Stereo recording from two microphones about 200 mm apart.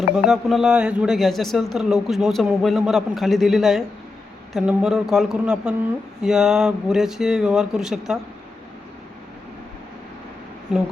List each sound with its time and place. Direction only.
0.3 s a man's voice: centre (ahead or behind)
10.7 s a man's voice: 5° right (ahead or behind)